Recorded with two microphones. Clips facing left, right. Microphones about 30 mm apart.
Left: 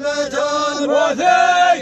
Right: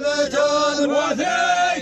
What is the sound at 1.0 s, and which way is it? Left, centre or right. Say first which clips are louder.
Chant: left 6 dB; left.